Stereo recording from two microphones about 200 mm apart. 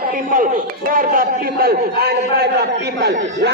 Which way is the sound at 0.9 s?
45° right (ahead or behind).